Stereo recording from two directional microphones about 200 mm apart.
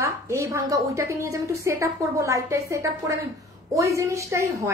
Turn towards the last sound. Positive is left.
turn(degrees=-15)  # may be behind; listen again after turning